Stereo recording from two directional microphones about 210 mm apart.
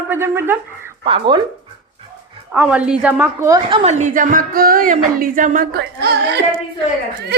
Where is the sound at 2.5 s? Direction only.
5° right (ahead or behind).